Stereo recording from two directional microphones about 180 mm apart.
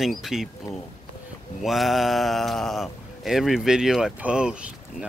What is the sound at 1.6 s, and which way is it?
Speech, centre (ahead or behind).